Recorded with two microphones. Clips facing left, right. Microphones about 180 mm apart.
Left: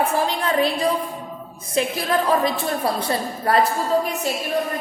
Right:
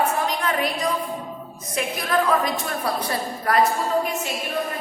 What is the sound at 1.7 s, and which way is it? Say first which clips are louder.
A woman's voice: left 2 dB; 30° left (ahead or behind).